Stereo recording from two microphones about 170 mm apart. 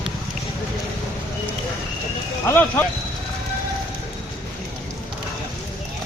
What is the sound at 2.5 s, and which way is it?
Speech, 10° left (ahead or behind).